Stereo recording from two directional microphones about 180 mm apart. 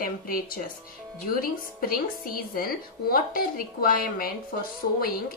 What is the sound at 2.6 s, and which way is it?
A woman's voice, 55° left (ahead or behind).